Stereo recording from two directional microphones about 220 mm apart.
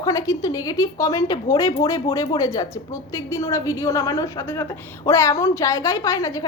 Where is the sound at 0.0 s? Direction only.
15° left (ahead or behind).